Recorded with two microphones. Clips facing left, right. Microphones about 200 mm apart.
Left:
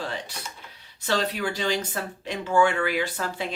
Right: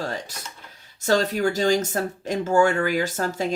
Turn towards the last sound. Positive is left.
turn(degrees=-45)  # may be behind; listen again after turning